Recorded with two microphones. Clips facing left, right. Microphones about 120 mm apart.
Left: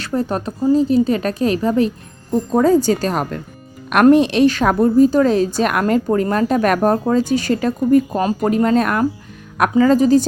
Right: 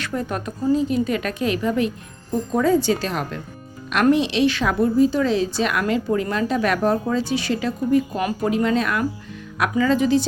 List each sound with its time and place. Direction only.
0.0 s a woman's voice: 35° left (ahead or behind)